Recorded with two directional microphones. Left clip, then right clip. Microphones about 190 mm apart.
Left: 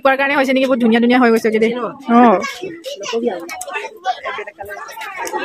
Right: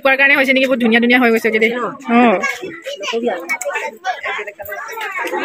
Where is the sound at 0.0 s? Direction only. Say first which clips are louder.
Right 2 dB; 15° left (ahead or behind).